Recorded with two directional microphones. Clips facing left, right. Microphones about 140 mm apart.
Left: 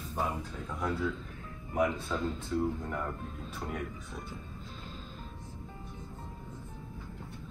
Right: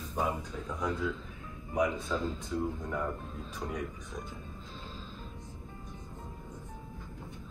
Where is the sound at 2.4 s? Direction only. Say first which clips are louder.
Left 2 dB; 15° right (ahead or behind).